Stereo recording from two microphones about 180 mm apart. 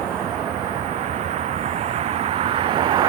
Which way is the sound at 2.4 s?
30° right (ahead or behind).